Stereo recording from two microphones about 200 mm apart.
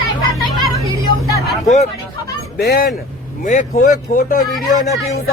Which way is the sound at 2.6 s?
50° left (ahead or behind).